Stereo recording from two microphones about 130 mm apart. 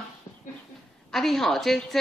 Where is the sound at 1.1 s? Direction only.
5° left (ahead or behind).